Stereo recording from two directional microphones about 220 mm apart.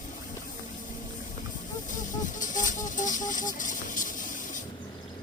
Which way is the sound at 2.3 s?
35° left (ahead or behind).